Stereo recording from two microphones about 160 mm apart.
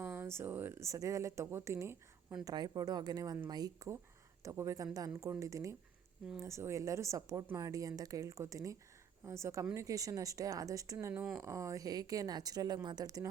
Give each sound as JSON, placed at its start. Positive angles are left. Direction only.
{"t": 0.0, "sound": "speech", "side_deg": -15}